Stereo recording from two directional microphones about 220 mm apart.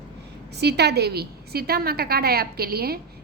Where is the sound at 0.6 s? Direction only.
50° right (ahead or behind).